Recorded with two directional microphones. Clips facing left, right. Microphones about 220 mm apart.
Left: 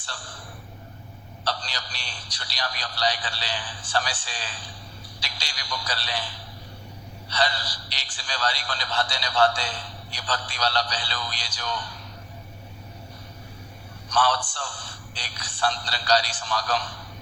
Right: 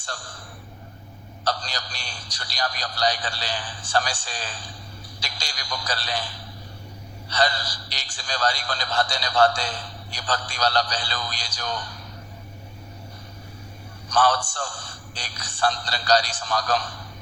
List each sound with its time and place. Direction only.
1.5 s a man's voice: 45° right (ahead or behind)
14.1 s a man's voice: 45° right (ahead or behind)